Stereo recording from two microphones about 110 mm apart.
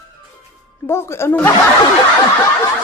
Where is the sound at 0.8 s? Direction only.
25° left (ahead or behind).